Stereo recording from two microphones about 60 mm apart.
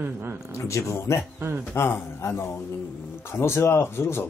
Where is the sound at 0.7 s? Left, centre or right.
Left.